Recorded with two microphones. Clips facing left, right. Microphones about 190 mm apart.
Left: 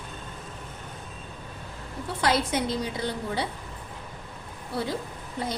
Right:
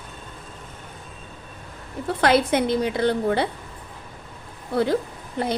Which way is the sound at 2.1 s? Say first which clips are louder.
Right 7 dB; 60° right (ahead or behind).